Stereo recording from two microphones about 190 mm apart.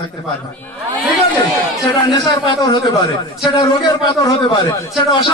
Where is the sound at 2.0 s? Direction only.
20° left (ahead or behind).